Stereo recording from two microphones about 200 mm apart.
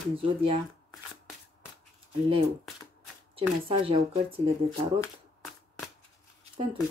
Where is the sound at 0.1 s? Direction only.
30° right (ahead or behind).